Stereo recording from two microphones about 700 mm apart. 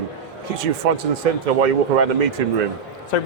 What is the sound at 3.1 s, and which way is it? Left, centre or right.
Speech, left.